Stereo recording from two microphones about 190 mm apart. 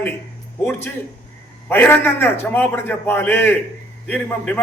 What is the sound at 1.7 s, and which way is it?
A man's voice, 10° left (ahead or behind).